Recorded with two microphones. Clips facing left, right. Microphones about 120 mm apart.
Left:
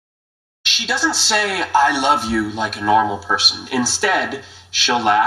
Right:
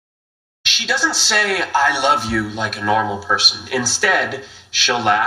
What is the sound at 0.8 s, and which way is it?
Speech, 30° left (ahead or behind).